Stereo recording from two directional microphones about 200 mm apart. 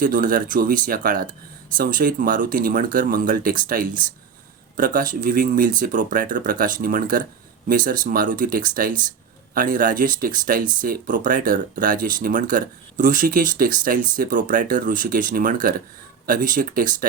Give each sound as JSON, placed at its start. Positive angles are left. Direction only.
{"t": 0.0, "sound": "speech", "side_deg": -45}